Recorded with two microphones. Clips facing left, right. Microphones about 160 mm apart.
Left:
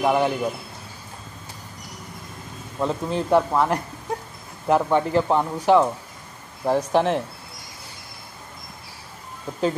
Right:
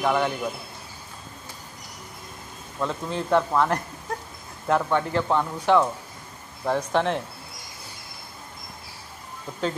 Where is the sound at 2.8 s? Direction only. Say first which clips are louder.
Left 4 dB; 20° left (ahead or behind).